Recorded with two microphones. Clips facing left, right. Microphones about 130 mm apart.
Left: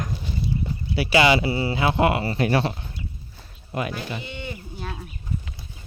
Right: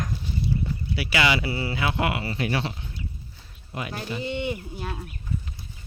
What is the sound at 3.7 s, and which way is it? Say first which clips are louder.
Speech: left 6 dB; 55° left (ahead or behind).